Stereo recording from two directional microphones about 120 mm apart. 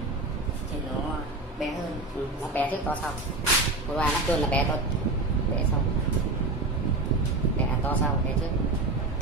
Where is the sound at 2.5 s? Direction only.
15° left (ahead or behind).